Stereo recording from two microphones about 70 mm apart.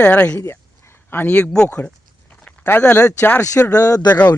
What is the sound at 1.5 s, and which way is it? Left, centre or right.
Speech, centre.